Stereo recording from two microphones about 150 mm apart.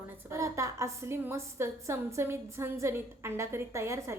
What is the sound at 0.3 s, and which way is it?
A woman's voice, 20° right (ahead or behind).